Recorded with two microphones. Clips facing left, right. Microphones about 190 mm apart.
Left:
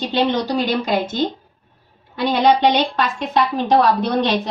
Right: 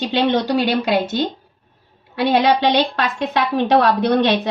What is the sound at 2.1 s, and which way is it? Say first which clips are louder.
A woman's voice: even; 65° right (ahead or behind).